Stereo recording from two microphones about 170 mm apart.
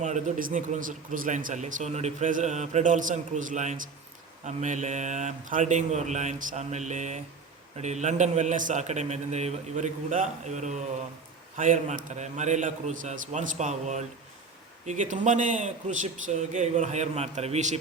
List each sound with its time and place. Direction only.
0.0 s speech: 45° right (ahead or behind)